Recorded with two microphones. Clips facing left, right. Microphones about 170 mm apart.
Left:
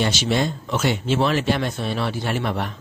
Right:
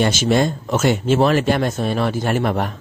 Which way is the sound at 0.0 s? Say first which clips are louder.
Right 5 dB; 45° right (ahead or behind).